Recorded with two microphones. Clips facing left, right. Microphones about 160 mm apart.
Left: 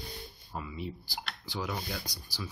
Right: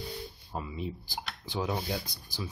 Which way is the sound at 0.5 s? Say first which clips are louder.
Right 2 dB; 25° right (ahead or behind).